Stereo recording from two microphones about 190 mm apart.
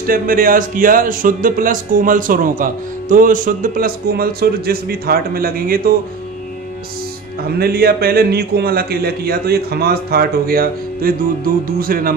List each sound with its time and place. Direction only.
0.0 s speech: 50° right (ahead or behind)
7.4 s speech: 55° right (ahead or behind)